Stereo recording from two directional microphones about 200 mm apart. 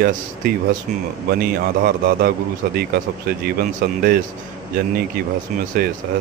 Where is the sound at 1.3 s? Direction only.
50° right (ahead or behind).